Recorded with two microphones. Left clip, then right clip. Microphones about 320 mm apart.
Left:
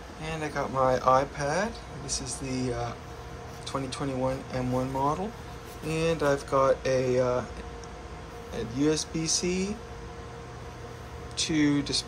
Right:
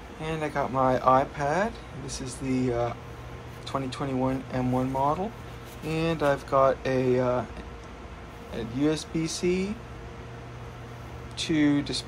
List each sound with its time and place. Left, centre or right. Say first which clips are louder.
0.2 s speech: right 3 dB; centre
8.5 s speech: even; centre
11.3 s speech: right 1 dB; centre